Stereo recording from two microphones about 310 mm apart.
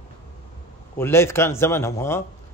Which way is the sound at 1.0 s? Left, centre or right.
Centre.